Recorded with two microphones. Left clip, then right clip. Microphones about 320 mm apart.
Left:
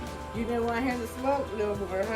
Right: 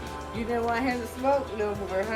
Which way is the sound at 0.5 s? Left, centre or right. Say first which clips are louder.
Right 2 dB; centre.